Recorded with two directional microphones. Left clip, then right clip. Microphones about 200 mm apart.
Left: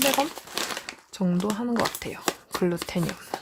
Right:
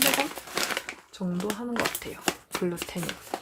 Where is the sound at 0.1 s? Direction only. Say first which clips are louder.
Left 2 dB; 5° right (ahead or behind).